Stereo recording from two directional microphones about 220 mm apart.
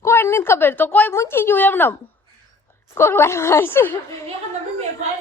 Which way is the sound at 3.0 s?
10° left (ahead or behind).